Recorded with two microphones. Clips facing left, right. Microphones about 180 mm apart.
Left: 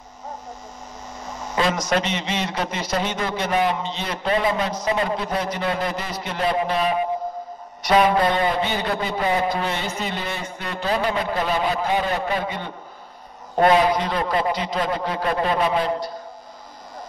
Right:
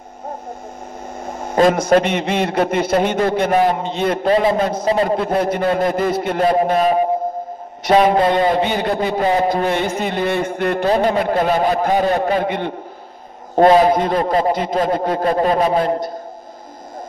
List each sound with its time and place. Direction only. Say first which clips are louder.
1.2 s a sound: right 9 dB; 55° right (ahead or behind)
2.0 s a man's voice: right 8 dB; 55° right (ahead or behind)
4.3 s a man's voice: right 5 dB; 35° right (ahead or behind)
4.6 s a man's voice: right 6 dB; 50° right (ahead or behind)
8.2 s a man's voice: right 5 dB; 30° right (ahead or behind)
9.0 s a man's voice: right 6 dB; 45° right (ahead or behind)
10.9 s a man's voice: right 5 dB; 40° right (ahead or behind); by 12.7 s 60° right (ahead or behind)
13.6 s a man's voice: right 6 dB; 40° right (ahead or behind)